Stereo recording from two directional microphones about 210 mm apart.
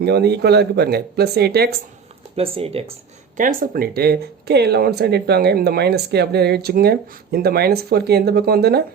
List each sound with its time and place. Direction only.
0.0 s speech: 50° right (ahead or behind)
2.3 s speech: 30° right (ahead or behind)
3.3 s speech: 40° right (ahead or behind)